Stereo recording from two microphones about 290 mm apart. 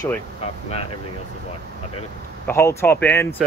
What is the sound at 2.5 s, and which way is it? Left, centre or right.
Speech, centre.